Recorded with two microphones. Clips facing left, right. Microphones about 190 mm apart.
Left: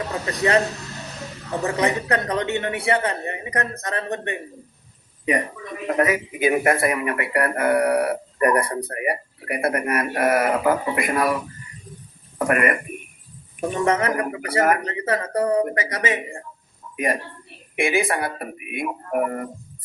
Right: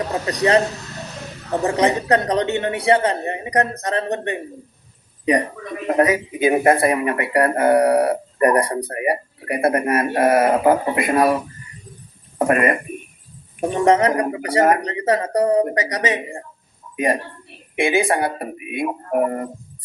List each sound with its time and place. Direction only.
0.1 s a woman's voice: 35° right (ahead or behind)
1.6 s a woman's voice: 30° right (ahead or behind)
17.7 s speech: 25° right (ahead or behind)